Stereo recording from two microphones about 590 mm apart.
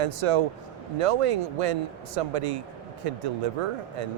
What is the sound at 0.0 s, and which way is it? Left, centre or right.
A man's voice, right.